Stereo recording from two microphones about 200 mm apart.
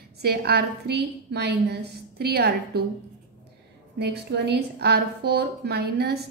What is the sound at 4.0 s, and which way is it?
A woman's voice, 60° right (ahead or behind).